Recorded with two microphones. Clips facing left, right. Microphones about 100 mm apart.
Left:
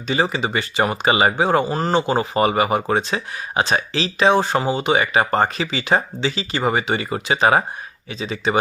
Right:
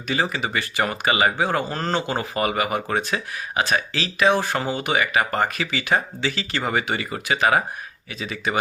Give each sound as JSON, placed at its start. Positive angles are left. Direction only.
{"t": 0.1, "sound": "speech", "side_deg": 20}